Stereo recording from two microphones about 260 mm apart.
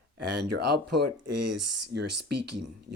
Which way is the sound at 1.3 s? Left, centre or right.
Right.